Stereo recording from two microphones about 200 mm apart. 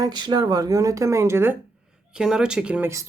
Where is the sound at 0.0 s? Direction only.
20° right (ahead or behind).